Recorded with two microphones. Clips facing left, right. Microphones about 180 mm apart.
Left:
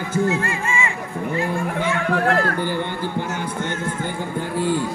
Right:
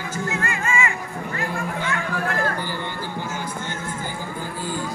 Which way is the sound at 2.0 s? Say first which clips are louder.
Left 7 dB; 65° left (ahead or behind).